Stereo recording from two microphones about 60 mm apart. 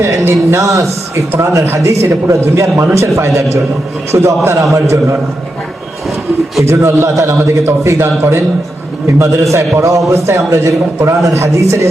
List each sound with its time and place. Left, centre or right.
0.0 s a man's voice: right
1.6 s a man's voice: right
6.7 s a man's voice: right
9.1 s a man's voice: right